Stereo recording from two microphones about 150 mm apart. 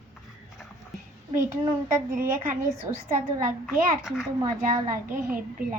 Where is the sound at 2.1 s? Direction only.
65° right (ahead or behind).